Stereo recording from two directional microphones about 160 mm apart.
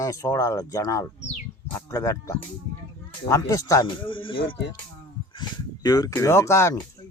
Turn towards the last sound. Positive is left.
turn(degrees=15)  # may be behind; listen again after turning